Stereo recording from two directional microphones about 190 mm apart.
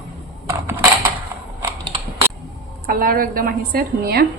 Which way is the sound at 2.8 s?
50° right (ahead or behind).